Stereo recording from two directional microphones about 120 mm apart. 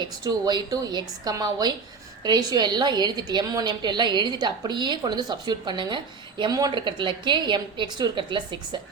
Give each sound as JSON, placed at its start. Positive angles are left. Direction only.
{"t": 0.0, "sound": "a woman's voice", "side_deg": -35}